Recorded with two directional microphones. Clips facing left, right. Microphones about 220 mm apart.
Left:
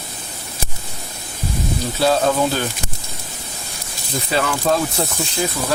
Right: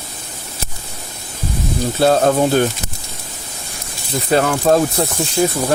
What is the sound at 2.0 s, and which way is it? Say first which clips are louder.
Speech: right 4 dB; 50° right (ahead or behind).